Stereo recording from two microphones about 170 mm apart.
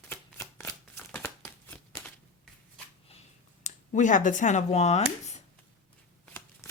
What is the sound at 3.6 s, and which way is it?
Speech, 45° left (ahead or behind).